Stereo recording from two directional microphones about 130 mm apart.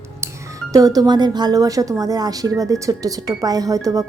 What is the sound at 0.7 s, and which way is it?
Speech, 25° right (ahead or behind).